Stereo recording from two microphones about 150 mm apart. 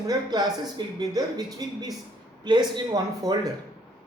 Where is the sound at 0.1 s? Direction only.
25° right (ahead or behind).